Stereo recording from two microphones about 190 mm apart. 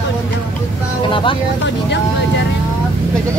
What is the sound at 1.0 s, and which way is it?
Speech, 25° left (ahead or behind).